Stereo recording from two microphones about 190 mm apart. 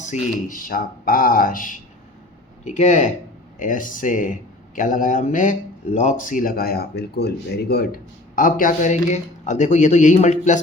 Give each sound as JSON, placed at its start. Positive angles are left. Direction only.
{"t": 0.0, "sound": "speech", "side_deg": 40}